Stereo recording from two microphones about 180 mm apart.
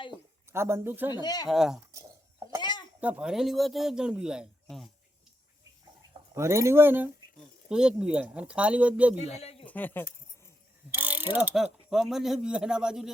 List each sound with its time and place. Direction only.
0.5 s speech: 15° right (ahead or behind)
1.1 s speech: 20° left (ahead or behind)
1.5 s a man's voice: centre (ahead or behind)
2.6 s a sound: 25° left (ahead or behind)
3.0 s a man's voice: 5° right (ahead or behind)
6.3 s speech: 15° right (ahead or behind)
9.4 s a sound: 35° left (ahead or behind)
9.6 s speech: 10° left (ahead or behind)
10.9 s speech: 10° right (ahead or behind)